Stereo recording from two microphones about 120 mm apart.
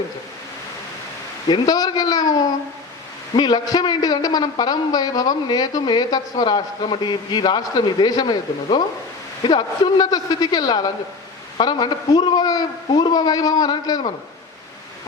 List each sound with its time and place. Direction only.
1.5 s a man's voice: 35° left (ahead or behind)